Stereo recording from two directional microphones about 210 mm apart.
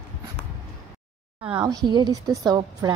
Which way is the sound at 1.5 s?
20° right (ahead or behind).